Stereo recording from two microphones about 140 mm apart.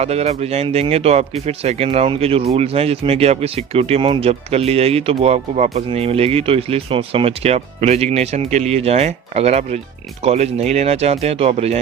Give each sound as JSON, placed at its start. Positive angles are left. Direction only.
{"t": 0.0, "sound": "speech", "side_deg": -50}